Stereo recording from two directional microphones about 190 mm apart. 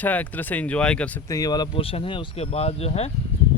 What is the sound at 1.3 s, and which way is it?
Speech, 20° left (ahead or behind).